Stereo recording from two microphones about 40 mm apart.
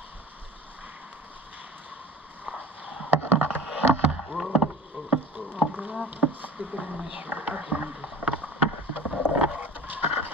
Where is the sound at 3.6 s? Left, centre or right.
Centre.